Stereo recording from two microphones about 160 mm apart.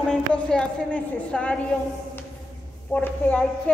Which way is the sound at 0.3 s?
5° left (ahead or behind).